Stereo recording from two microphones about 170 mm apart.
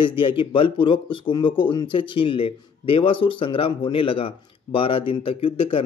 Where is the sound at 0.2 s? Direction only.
30° left (ahead or behind).